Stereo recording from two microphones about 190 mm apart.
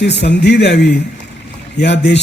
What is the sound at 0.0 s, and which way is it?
A man's voice, 65° left (ahead or behind).